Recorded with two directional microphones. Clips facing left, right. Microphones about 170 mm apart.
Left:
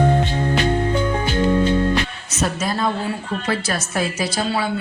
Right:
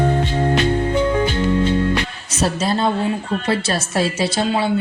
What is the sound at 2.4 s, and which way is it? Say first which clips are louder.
A woman's voice: right 3 dB; 30° right (ahead or behind).